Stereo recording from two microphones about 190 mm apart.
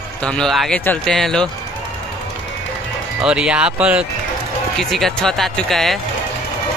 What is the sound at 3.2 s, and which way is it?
Speech, 5° right (ahead or behind).